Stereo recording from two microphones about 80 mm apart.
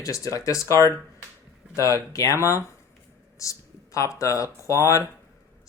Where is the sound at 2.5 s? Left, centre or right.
Left.